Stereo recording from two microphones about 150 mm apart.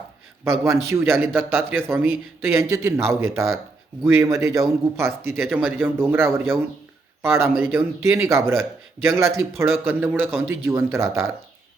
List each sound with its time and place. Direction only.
0.6 s a man's voice: 20° right (ahead or behind)